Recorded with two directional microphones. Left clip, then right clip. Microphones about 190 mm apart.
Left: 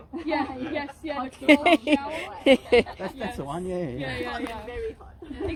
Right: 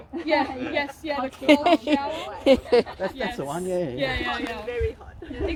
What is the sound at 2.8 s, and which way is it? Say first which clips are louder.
Speech: right 4 dB; 45° left (ahead or behind).